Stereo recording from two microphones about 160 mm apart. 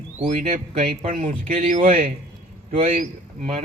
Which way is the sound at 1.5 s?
55° right (ahead or behind).